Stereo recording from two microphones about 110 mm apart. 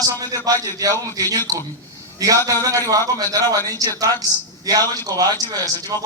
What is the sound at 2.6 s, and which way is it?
A man's voice, 30° right (ahead or behind).